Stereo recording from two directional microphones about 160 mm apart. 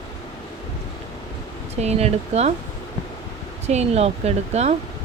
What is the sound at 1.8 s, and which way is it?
Speech, 40° right (ahead or behind).